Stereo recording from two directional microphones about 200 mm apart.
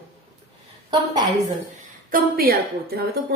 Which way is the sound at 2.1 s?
45° right (ahead or behind).